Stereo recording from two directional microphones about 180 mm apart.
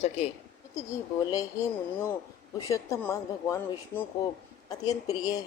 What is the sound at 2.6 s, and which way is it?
Speech, 20° left (ahead or behind).